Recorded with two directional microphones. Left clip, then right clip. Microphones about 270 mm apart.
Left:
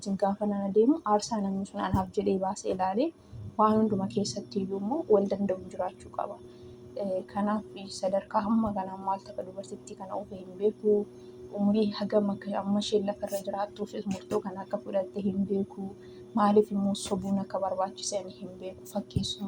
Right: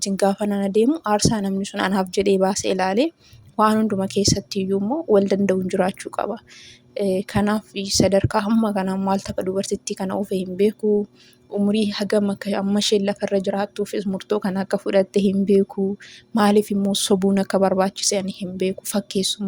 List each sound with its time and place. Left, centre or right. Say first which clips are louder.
0.0 s a woman's voice: right 9 dB; right
11.7 s a woman's voice: right 6 dB; right